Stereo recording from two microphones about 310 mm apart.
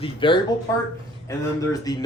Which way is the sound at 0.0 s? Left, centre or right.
Centre.